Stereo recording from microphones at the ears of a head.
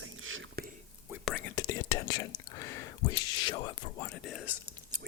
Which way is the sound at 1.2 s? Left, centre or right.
Left.